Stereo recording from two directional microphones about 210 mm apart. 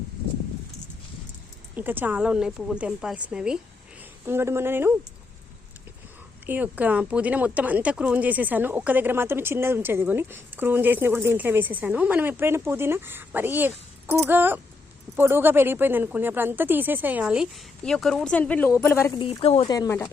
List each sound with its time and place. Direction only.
1.7 s a woman's voice: 10° right (ahead or behind)
6.4 s speech: 10° right (ahead or behind); by 19.1 s 10° left (ahead or behind)
19.2 s speech: 25° left (ahead or behind)